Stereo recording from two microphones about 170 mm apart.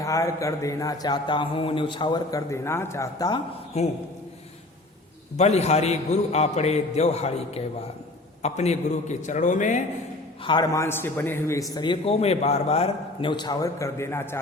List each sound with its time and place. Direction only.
0.0 s speech: 20° left (ahead or behind)
3.7 s a man's voice: 40° left (ahead or behind)
5.4 s a man's voice: 40° left (ahead or behind)
10.4 s speech: 25° left (ahead or behind)
13.3 s a man's voice: 25° left (ahead or behind)